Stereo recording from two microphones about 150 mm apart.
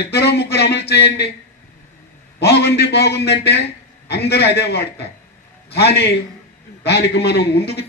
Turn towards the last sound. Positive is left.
turn(degrees=90)